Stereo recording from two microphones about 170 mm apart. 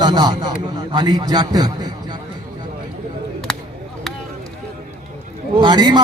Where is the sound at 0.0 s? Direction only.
25° right (ahead or behind).